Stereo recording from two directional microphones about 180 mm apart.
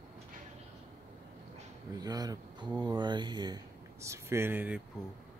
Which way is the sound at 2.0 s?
20° right (ahead or behind).